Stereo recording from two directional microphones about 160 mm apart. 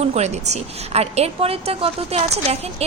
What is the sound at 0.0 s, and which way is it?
A woman's voice, 45° right (ahead or behind).